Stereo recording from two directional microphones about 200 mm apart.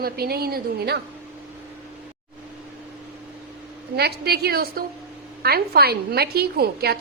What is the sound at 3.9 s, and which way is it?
A woman's voice, 55° right (ahead or behind).